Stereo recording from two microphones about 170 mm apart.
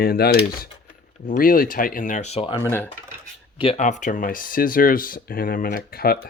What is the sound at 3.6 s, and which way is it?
Speech, 40° left (ahead or behind).